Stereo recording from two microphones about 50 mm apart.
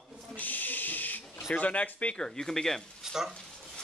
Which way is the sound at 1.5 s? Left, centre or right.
Left.